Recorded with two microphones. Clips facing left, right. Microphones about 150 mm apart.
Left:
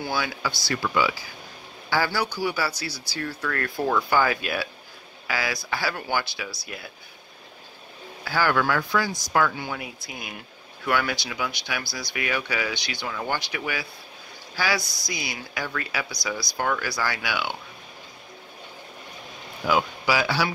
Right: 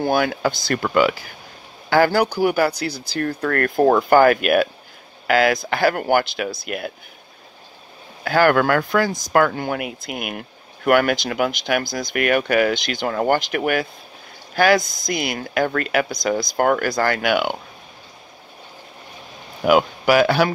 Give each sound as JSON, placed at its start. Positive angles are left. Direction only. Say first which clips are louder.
{"t": 0.0, "sound": "speech", "louder": "right 9 dB", "side_deg": -50}
{"t": 8.2, "sound": "speech", "louder": "right 8 dB", "side_deg": -55}
{"t": 19.6, "sound": "speech", "louder": "right 7 dB", "side_deg": -55}